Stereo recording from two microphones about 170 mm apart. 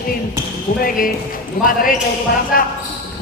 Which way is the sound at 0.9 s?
55° left (ahead or behind).